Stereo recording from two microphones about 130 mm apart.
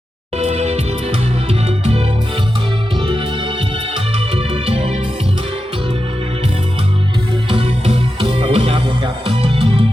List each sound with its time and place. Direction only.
0.3 s music: 55° right (ahead or behind)
4.5 s music: 50° right (ahead or behind)
7.5 s music: 50° right (ahead or behind)